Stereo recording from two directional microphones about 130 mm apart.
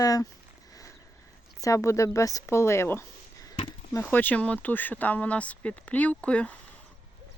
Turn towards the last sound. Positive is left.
turn(degrees=10)  # may be behind; listen again after turning